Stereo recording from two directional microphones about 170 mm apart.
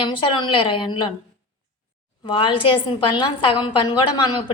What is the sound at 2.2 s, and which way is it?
A woman's voice, 30° left (ahead or behind).